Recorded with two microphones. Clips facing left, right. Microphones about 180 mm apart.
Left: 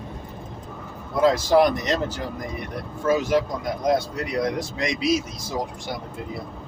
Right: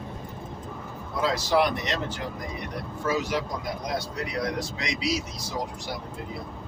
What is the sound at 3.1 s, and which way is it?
Speech, 55° left (ahead or behind).